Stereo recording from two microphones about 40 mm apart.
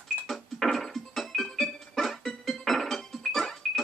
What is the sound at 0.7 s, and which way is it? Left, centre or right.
Music, centre.